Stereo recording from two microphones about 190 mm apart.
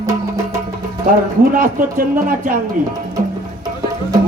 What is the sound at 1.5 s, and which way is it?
Speech, 45° right (ahead or behind).